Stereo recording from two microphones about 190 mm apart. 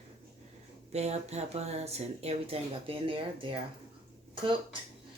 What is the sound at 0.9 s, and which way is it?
Speech, 35° right (ahead or behind).